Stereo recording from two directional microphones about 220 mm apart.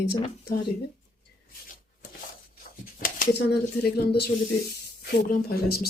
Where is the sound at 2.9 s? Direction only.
40° left (ahead or behind).